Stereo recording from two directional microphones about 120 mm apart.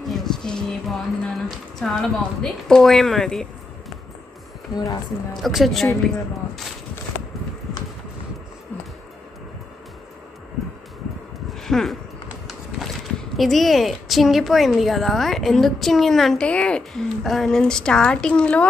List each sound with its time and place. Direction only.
0.1 s a woman's voice: 5° left (ahead or behind)
4.7 s speech: 35° left (ahead or behind)
5.4 s a woman's voice: centre (ahead or behind)
11.5 s a sound: 5° left (ahead or behind)
13.4 s a woman's voice: centre (ahead or behind)